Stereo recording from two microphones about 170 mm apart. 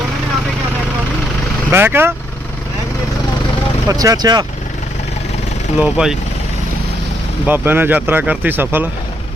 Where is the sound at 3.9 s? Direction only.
20° right (ahead or behind).